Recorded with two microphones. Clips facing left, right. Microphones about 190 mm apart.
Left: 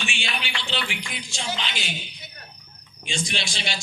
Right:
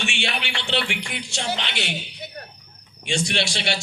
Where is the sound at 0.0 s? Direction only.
65° right (ahead or behind).